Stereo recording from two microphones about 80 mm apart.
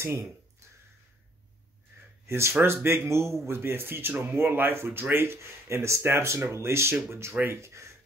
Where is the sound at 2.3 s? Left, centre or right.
Right.